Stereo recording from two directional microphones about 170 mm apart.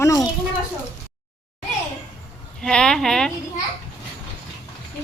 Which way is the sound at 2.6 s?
5° left (ahead or behind).